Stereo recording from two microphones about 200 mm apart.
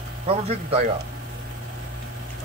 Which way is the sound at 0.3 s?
30° right (ahead or behind).